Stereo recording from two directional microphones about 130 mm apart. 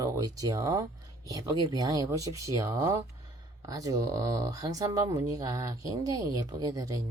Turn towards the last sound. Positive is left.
turn(degrees=-30)  # may be behind; listen again after turning